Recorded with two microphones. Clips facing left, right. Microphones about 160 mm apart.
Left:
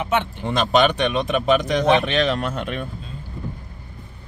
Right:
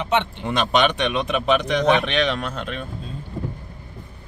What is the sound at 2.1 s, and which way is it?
Speech, 45° left (ahead or behind).